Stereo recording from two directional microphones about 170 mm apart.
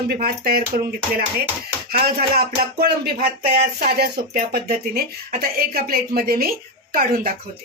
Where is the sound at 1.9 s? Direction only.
60° right (ahead or behind).